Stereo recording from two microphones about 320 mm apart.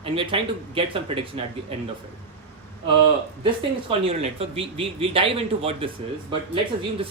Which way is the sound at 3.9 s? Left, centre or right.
Centre.